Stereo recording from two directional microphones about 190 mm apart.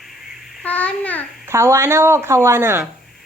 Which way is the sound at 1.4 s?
15° right (ahead or behind).